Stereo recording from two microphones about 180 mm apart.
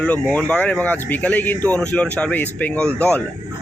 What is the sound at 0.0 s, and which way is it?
Speech, 5° left (ahead or behind).